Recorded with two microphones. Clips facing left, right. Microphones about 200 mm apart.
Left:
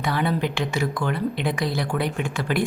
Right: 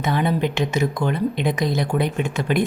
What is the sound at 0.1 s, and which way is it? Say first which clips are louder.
A woman's voice: right 3 dB; 20° right (ahead or behind).